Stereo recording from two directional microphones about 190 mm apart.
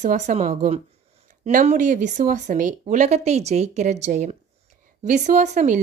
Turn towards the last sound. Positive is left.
turn(degrees=-40)  # may be behind; listen again after turning